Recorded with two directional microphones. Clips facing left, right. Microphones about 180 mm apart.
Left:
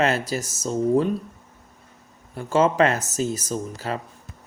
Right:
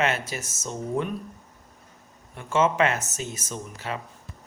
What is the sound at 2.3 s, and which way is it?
Speech, 35° left (ahead or behind).